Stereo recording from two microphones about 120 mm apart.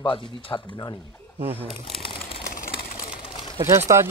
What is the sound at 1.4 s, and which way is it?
Speech, 15° right (ahead or behind).